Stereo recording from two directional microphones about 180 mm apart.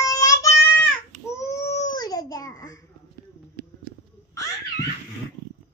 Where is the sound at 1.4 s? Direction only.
15° left (ahead or behind).